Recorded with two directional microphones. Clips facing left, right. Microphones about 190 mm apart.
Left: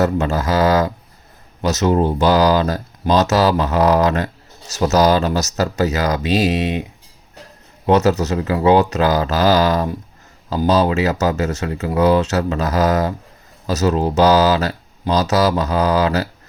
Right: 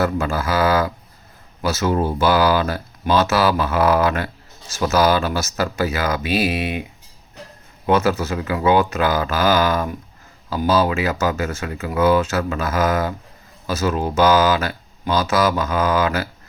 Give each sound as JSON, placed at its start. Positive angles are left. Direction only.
{"t": 0.0, "sound": "speech", "side_deg": 20}
{"t": 0.6, "sound": "speech", "side_deg": 40}
{"t": 1.8, "sound": "speech", "side_deg": 20}
{"t": 2.1, "sound": "speech", "side_deg": 40}
{"t": 7.9, "sound": "a man's voice", "side_deg": 40}